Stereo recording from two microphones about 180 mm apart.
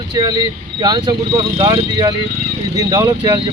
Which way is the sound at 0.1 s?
25° right (ahead or behind).